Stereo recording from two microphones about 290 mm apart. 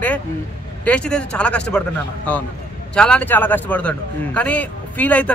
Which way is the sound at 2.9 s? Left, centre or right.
Centre.